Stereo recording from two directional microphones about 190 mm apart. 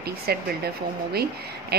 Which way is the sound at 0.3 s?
55° right (ahead or behind).